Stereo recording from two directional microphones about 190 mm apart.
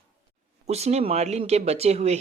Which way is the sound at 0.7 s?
35° right (ahead or behind).